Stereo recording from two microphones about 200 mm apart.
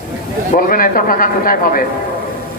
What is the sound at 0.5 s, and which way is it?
A man's voice, 45° left (ahead or behind).